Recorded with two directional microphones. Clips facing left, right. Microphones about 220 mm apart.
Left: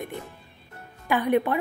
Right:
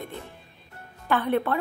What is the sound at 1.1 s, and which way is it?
Speech, 15° left (ahead or behind).